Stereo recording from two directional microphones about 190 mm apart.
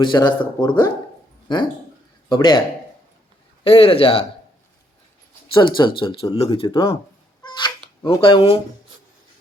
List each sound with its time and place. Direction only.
0.0 s speech: 25° left (ahead or behind)
2.3 s speech: 25° left (ahead or behind)
3.6 s speech: 30° left (ahead or behind)
5.5 s speech: 25° left (ahead or behind)
7.4 s cat: 25° left (ahead or behind)